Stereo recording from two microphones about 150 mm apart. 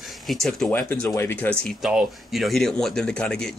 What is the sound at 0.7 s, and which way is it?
Speech, 10° left (ahead or behind).